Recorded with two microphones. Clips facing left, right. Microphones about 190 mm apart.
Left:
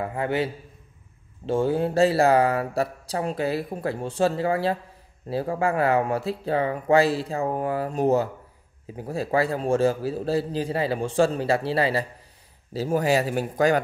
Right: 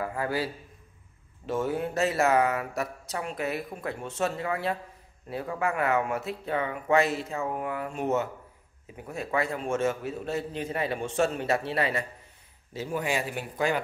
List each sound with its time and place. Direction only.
0.0 s a man's voice: 25° left (ahead or behind); by 13.7 s 40° left (ahead or behind)